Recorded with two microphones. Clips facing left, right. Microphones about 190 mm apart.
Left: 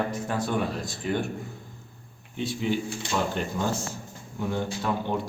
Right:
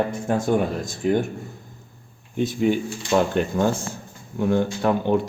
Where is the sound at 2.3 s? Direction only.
50° right (ahead or behind).